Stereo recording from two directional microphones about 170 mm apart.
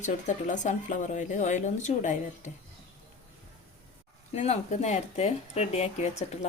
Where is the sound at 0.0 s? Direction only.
45° left (ahead or behind).